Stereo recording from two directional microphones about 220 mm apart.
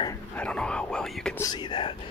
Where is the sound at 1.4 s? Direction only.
20° left (ahead or behind).